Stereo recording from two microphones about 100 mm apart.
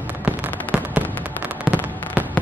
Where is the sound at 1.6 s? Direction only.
15° right (ahead or behind).